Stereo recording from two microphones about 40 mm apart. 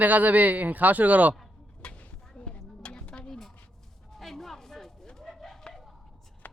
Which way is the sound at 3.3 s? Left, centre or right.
Centre.